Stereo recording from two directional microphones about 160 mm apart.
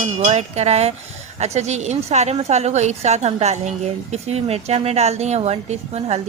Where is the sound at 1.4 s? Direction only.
45° right (ahead or behind).